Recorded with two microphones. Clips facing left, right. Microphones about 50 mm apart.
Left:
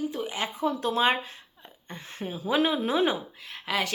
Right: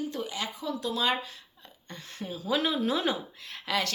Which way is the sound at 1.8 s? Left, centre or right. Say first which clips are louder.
Left 3 dB; left.